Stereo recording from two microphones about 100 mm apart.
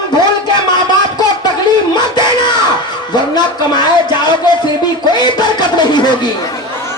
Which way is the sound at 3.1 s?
45° left (ahead or behind).